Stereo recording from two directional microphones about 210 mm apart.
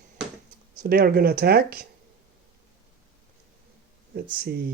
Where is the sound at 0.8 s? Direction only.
45° right (ahead or behind).